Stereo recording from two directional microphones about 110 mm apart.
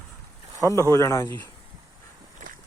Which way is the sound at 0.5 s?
30° right (ahead or behind).